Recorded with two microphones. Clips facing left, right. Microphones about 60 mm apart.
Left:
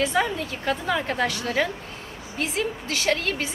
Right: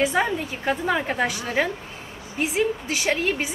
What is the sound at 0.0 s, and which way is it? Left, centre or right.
A woman's voice, centre.